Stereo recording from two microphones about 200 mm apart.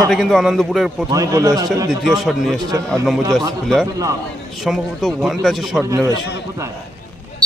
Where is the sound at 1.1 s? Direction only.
15° right (ahead or behind).